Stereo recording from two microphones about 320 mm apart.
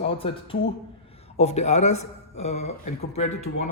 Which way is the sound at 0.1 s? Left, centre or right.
Centre.